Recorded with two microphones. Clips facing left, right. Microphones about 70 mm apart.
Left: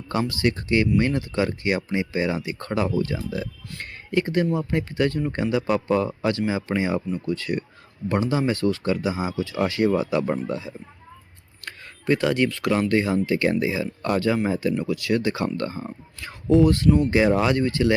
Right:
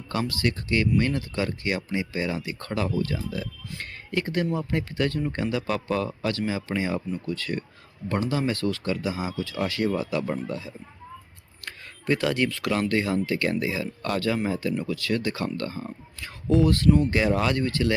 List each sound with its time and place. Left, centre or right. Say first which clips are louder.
0.1 s a man's voice: left 3 dB; centre
11.6 s a sound: left 3 dB; centre
12.9 s a man's voice: left 3 dB; centre
15.9 s a man's voice: left 2 dB; centre